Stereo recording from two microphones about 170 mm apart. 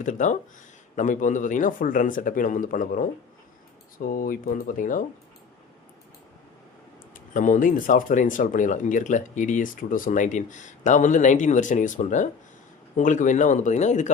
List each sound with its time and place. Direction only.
0.0 s speech: 45° left (ahead or behind)
7.3 s speech: 50° left (ahead or behind)